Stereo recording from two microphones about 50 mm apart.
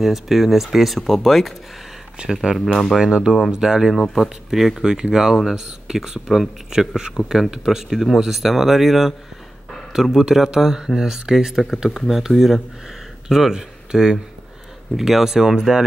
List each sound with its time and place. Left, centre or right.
0.0 s speech: centre
2.2 s speech: right
2.5 s speech: centre
3.0 s speech: centre
4.1 s speech: centre
6.2 s speech: centre
6.7 s speech: centre